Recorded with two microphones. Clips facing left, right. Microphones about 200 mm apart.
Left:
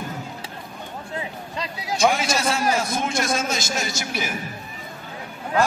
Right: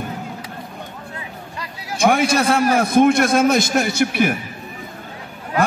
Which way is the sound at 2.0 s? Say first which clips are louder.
Right 6 dB; 55° right (ahead or behind).